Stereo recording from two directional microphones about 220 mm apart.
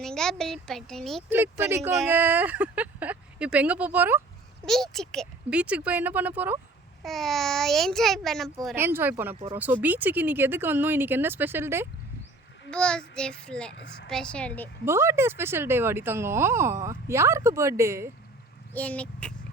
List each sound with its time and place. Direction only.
0.0 s speech: 5° left (ahead or behind)
1.3 s speech: 10° right (ahead or behind)
4.6 s speech: centre (ahead or behind)
8.7 s speech: 10° right (ahead or behind)
12.7 s speech: 5° left (ahead or behind)
13.7 s a woman's voice: 50° left (ahead or behind)
14.1 s speech: 5° left (ahead or behind)
14.8 s speech: 10° right (ahead or behind)
18.7 s speech: 5° left (ahead or behind)